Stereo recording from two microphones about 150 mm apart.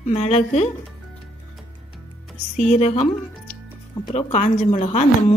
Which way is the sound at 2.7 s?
45° left (ahead or behind).